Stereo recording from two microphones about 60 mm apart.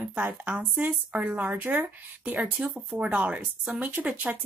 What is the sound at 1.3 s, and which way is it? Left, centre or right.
Speech, right.